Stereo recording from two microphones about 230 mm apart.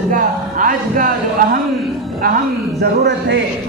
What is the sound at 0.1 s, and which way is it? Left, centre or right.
Speech, right.